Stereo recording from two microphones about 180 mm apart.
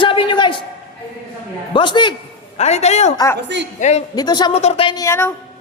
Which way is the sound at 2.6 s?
35° left (ahead or behind).